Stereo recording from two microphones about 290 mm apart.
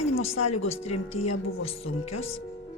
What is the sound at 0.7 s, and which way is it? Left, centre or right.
Speech, left.